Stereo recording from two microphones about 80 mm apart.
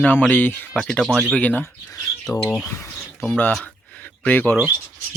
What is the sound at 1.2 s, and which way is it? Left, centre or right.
Speech, centre.